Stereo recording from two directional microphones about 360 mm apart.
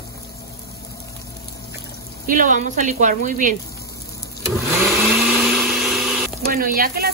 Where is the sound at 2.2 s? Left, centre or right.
Right.